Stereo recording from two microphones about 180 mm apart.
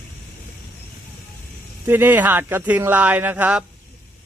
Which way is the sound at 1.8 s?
10° right (ahead or behind).